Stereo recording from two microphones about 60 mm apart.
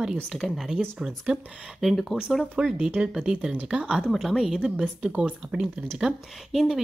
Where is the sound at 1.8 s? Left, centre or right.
Centre.